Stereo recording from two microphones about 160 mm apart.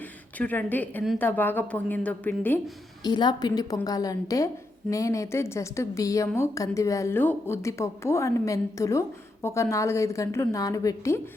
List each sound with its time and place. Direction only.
0.3 s a woman's voice: 10° left (ahead or behind)
3.0 s a woman's voice: 25° left (ahead or behind)